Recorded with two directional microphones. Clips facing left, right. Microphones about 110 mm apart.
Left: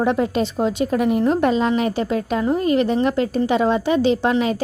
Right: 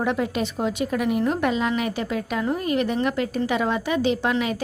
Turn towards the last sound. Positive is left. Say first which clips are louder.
# left 5 dB
turn(degrees=30)  # may be behind; listen again after turning